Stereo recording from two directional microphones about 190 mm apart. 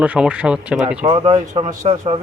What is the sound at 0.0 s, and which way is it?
Speech, 5° right (ahead or behind).